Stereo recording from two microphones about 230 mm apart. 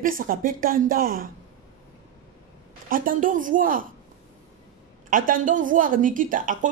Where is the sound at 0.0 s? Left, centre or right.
Right.